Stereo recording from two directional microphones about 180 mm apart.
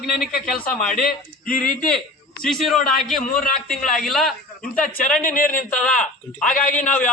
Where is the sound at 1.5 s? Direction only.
50° left (ahead or behind).